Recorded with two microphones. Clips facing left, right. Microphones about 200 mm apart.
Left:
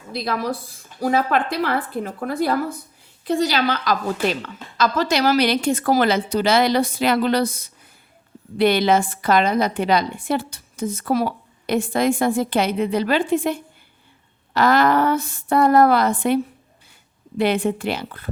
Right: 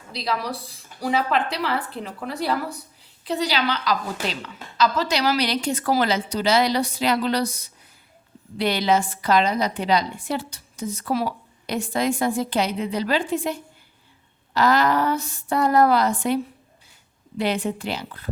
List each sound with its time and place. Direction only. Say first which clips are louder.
0.1 s a woman's voice: left 3 dB; 50° left (ahead or behind)